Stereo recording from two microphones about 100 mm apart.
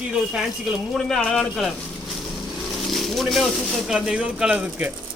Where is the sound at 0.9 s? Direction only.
5° left (ahead or behind).